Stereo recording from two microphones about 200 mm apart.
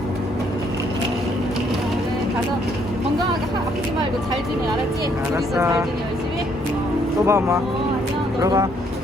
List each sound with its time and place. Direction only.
7.3 s speech: 15° right (ahead or behind)